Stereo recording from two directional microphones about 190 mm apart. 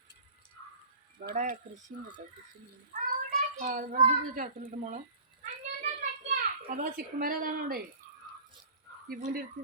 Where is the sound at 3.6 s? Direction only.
45° right (ahead or behind).